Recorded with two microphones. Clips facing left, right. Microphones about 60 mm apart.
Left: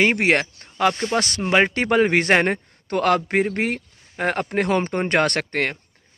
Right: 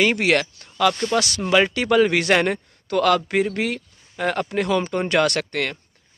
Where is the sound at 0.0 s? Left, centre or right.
Left.